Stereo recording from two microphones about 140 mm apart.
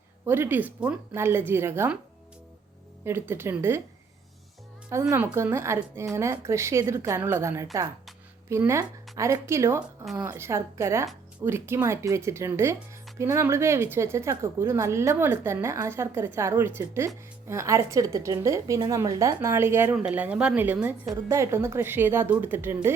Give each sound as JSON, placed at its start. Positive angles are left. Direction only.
{"t": 0.3, "sound": "speech", "side_deg": -15}
{"t": 3.0, "sound": "speech", "side_deg": -15}
{"t": 5.1, "sound": "a woman's voice", "side_deg": -20}